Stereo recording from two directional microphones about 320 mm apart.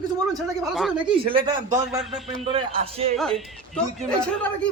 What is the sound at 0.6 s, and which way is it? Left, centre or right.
Speech, centre.